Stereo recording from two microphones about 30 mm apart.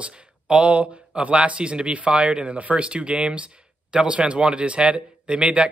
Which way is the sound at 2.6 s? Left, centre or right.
Right.